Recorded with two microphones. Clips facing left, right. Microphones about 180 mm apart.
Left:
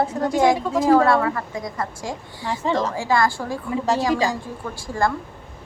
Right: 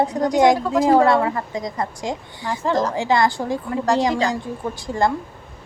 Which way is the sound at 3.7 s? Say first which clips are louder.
Right 1 dB; 5° left (ahead or behind).